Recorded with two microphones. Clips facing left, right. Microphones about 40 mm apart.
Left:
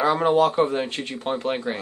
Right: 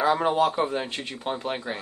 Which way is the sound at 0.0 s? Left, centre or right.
Centre.